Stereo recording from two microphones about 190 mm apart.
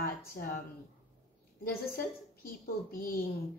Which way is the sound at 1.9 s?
50° left (ahead or behind).